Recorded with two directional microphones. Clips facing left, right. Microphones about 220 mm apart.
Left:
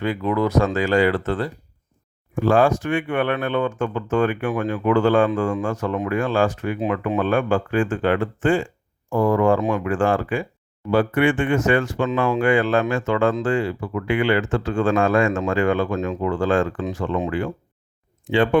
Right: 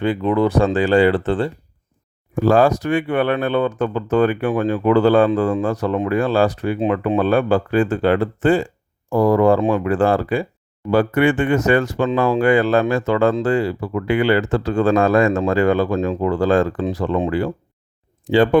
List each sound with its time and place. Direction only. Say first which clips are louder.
0.0 s speech: right 4 dB; 30° right (ahead or behind)